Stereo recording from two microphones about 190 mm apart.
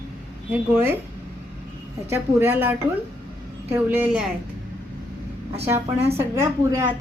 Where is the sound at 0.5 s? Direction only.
10° right (ahead or behind).